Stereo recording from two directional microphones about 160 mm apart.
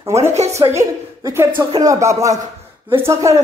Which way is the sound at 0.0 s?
15° right (ahead or behind).